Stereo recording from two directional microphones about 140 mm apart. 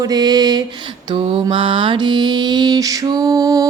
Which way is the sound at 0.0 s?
30° right (ahead or behind).